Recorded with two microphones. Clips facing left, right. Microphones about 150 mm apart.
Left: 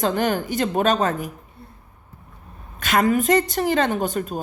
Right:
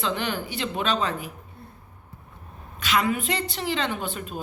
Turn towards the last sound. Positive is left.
turn(degrees=40)  # may be behind; listen again after turning